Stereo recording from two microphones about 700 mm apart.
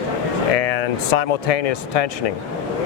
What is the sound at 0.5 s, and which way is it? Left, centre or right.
Speech, left.